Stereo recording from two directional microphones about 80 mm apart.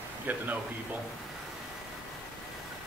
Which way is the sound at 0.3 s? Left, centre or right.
Right.